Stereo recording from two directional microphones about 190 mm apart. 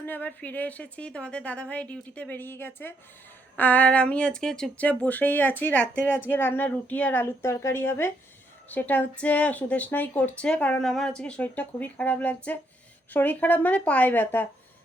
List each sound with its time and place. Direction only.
0.0 s a woman's voice: 10° left (ahead or behind)